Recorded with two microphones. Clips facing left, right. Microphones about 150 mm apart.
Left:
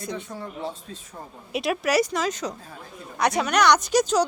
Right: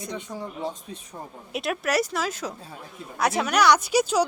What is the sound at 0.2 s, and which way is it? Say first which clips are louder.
Speech: right 1 dB; 15° right (ahead or behind).